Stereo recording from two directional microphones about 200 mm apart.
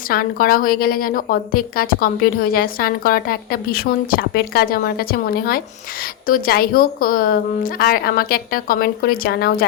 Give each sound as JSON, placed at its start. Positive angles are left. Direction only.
{"t": 0.1, "sound": "a woman's voice", "side_deg": 45}